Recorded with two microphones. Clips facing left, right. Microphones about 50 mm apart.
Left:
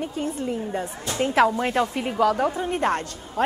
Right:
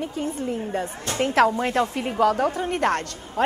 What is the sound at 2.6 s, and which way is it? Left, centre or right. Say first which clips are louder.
Speech: right 1 dB; right.